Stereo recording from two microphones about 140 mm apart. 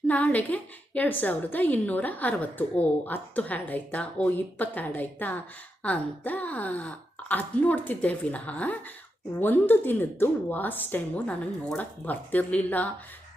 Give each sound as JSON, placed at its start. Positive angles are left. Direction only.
{"t": 0.1, "sound": "a woman's voice", "side_deg": 10}